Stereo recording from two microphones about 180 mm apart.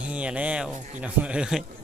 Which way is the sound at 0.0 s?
5° right (ahead or behind).